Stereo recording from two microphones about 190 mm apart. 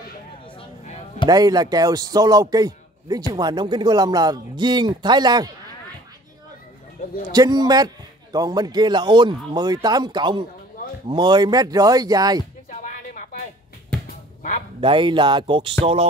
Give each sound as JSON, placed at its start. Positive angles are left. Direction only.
{"t": 0.6, "sound": "basketball bounce", "side_deg": 30}
{"t": 1.3, "sound": "a man's voice", "side_deg": -20}
{"t": 7.3, "sound": "a man's voice", "side_deg": -20}
{"t": 12.6, "sound": "a sound", "side_deg": 40}
{"t": 14.8, "sound": "a man's voice", "side_deg": -25}